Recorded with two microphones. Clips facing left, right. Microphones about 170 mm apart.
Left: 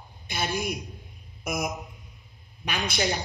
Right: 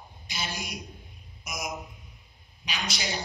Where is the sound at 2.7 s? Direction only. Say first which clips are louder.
Left 6 dB; 55° left (ahead or behind).